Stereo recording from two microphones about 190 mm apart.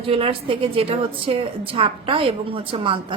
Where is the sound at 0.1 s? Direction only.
30° right (ahead or behind).